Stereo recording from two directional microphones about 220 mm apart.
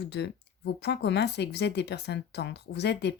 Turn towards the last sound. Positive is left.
turn(degrees=50)  # may be behind; listen again after turning